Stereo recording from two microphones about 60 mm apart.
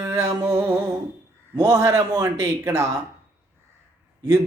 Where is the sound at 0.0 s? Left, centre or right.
Right.